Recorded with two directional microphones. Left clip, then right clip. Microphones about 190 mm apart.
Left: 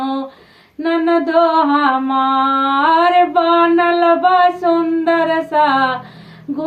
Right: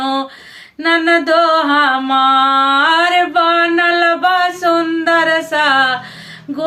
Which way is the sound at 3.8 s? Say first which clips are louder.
Even; 20° right (ahead or behind).